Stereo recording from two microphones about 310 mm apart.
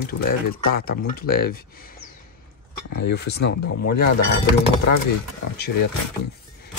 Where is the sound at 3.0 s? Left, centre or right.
Left.